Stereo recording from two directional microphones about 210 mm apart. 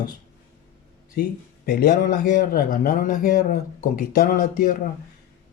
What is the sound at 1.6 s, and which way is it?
Speech, 45° left (ahead or behind).